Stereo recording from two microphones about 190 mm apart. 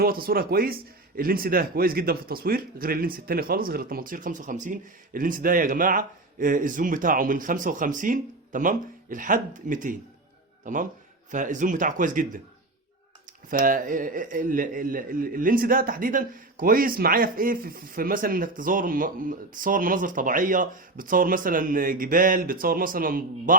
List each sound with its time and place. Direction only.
0.0 s speech: 50° right (ahead or behind)
13.5 s speech: 45° right (ahead or behind)